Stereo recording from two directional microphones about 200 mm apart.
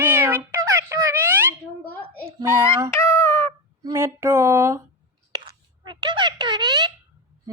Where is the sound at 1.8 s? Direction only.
10° left (ahead or behind).